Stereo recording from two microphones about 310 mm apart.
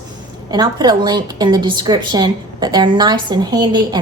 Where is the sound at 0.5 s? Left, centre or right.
Centre.